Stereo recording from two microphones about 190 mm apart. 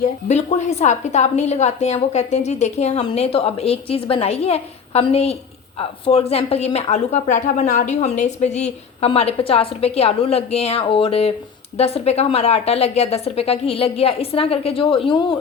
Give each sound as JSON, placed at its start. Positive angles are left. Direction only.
{"t": 0.3, "sound": "a woman's voice", "side_deg": 35}